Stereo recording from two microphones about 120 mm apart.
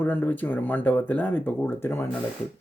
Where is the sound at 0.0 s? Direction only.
15° left (ahead or behind).